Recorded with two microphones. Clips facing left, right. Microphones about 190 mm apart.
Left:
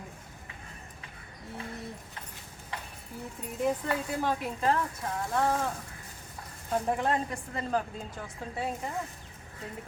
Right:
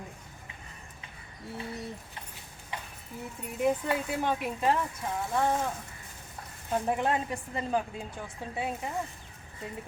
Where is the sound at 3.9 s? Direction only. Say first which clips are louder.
Right 1 dB; 20° right (ahead or behind).